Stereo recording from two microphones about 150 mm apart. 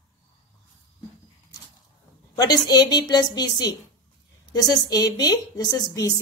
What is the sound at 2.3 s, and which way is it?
A woman's voice, 25° left (ahead or behind).